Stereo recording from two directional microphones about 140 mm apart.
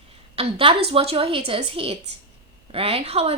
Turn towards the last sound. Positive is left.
turn(degrees=-45)  # may be behind; listen again after turning